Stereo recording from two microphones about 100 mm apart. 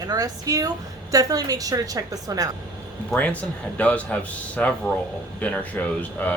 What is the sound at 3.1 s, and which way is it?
Speech, 15° left (ahead or behind).